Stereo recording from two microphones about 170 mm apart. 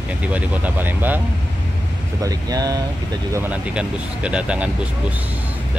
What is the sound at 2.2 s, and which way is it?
Speech, 20° right (ahead or behind).